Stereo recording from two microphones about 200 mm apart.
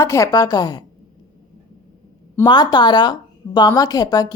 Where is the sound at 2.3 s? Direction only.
20° left (ahead or behind).